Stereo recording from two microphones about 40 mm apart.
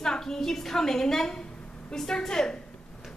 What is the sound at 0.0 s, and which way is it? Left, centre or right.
A woman's voice, centre.